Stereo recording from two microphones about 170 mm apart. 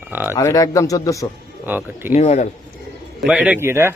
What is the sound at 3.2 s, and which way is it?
Speech, 5° right (ahead or behind).